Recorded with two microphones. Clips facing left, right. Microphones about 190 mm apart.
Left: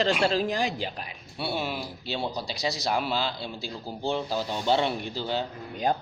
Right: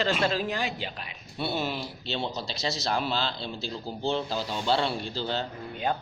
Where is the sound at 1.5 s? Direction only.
10° left (ahead or behind).